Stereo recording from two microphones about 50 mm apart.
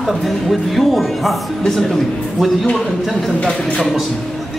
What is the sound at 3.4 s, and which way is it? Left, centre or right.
Speech, centre.